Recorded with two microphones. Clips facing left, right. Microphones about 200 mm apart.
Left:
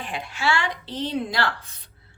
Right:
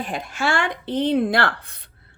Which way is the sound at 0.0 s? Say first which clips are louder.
Right 2 dB; 40° right (ahead or behind).